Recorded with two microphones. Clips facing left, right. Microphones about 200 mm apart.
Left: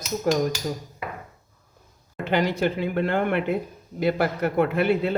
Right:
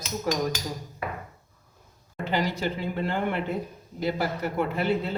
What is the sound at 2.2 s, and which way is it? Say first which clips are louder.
Speech: left 5 dB; 60° left (ahead or behind).